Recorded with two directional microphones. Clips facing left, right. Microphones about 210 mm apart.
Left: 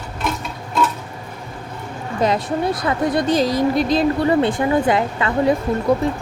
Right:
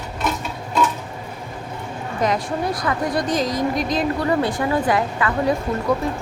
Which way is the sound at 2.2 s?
25° left (ahead or behind).